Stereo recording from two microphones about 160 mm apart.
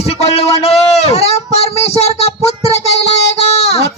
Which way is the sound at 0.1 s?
40° left (ahead or behind).